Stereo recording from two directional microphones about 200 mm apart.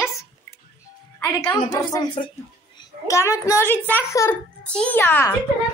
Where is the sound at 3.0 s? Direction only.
15° left (ahead or behind).